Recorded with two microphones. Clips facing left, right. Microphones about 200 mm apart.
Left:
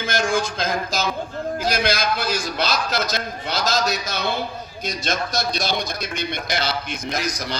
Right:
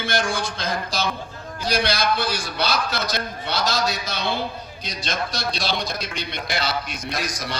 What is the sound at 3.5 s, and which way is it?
A man's voice, 45° left (ahead or behind).